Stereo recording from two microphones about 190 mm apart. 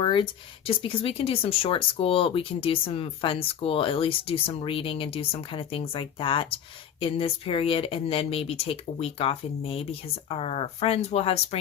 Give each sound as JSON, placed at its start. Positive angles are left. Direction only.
{"t": 0.0, "sound": "speech", "side_deg": 25}